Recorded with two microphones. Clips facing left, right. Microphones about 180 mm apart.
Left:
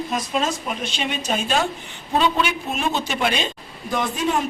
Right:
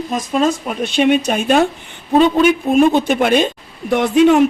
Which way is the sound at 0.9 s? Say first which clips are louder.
Right 13 dB; 60° right (ahead or behind).